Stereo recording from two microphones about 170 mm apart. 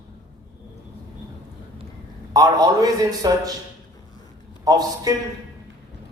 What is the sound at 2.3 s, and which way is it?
A man's voice, 20° right (ahead or behind).